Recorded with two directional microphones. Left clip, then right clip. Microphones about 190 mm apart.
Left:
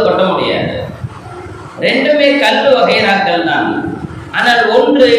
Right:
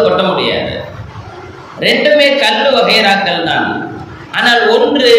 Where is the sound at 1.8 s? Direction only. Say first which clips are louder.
Right 2 dB; 50° right (ahead or behind).